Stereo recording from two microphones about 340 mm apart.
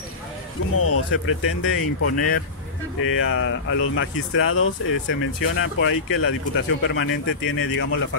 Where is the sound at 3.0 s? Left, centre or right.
Left.